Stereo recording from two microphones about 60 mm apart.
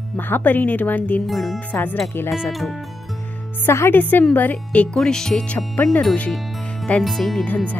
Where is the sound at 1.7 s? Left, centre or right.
Left.